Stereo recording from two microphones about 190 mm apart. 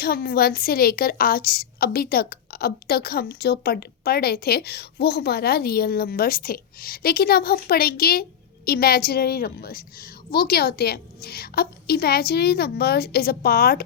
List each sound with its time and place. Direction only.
0.0 s a woman's voice: 55° left (ahead or behind)